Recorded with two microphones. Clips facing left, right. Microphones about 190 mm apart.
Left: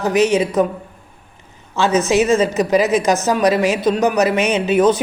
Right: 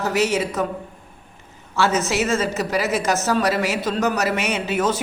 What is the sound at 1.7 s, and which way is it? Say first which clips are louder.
A woman's voice: left 5 dB; 15° left (ahead or behind).